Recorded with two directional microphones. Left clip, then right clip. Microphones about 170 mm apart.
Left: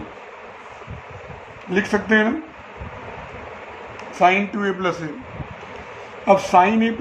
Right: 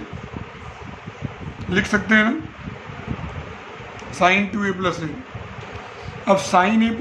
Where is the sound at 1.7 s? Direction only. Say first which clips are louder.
Even; 35° right (ahead or behind).